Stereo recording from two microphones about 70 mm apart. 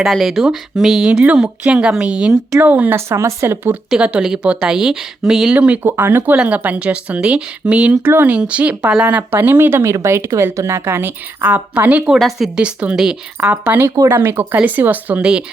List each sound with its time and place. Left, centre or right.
0.0 s speech: centre
1.2 s speech: centre
2.9 s speech: right
4.2 s speech: centre
5.5 s speech: centre
6.3 s speech: centre
8.0 s speech: right
9.3 s speech: right
13.4 s speech: right
13.8 s speech: right
14.1 s speech: right